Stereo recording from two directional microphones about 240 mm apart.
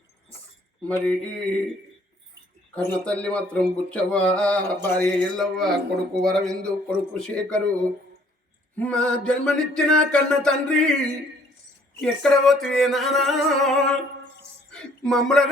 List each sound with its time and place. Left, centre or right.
0.9 s speech: centre
2.7 s speech: centre
8.7 s speech: centre